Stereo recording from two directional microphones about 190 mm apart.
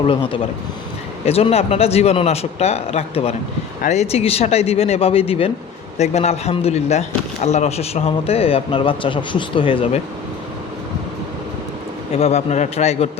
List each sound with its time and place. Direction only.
0.1 s a man's voice: 25° left (ahead or behind)
12.1 s a man's voice: 35° left (ahead or behind)